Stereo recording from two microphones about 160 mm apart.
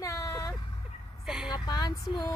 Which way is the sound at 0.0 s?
20° left (ahead or behind).